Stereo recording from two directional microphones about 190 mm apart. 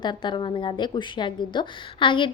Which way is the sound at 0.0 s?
25° left (ahead or behind).